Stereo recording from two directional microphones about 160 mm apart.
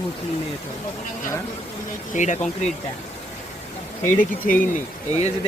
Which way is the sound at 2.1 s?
50° left (ahead or behind).